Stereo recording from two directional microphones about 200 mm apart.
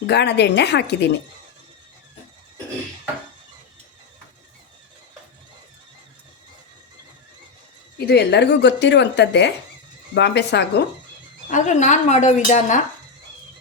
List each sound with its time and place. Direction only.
0.1 s speech: 55° left (ahead or behind)
7.9 s speech: 55° left (ahead or behind)
11.5 s a woman's voice: 35° left (ahead or behind)